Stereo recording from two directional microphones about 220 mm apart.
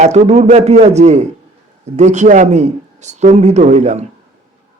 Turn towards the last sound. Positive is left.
turn(degrees=-30)  # may be behind; listen again after turning